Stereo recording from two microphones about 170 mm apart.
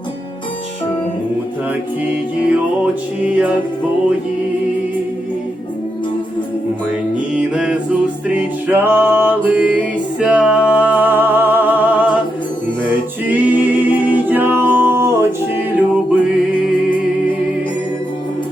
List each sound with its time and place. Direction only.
2.5 s music: 5° right (ahead or behind)
7.3 s music: 5° right (ahead or behind)
13.2 s a capella: 10° right (ahead or behind)